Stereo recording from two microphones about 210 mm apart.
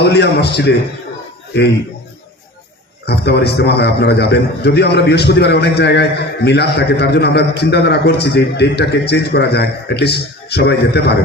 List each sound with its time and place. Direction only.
0.0 s a man's voice: 50° left (ahead or behind)
3.1 s a man's voice: 50° left (ahead or behind)